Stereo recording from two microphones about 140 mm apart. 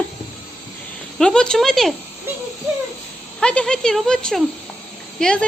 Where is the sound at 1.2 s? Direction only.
5° left (ahead or behind).